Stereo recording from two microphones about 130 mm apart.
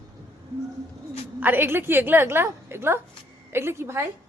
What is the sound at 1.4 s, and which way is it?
A woman's voice, 15° right (ahead or behind).